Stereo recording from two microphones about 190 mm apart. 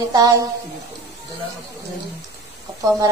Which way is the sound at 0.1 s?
20° right (ahead or behind).